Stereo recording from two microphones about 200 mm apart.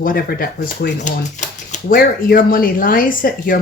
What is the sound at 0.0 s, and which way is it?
Speech, 45° left (ahead or behind).